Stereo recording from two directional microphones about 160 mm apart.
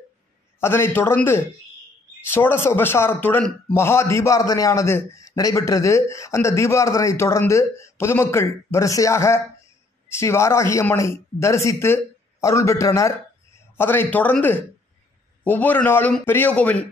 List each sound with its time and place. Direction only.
0.6 s a man's voice: 15° left (ahead or behind)